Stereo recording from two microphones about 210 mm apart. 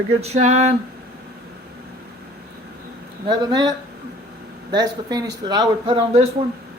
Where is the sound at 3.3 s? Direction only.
20° right (ahead or behind).